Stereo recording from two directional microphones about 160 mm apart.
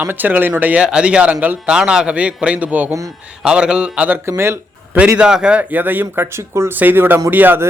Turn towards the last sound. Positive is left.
turn(degrees=-10)  # may be behind; listen again after turning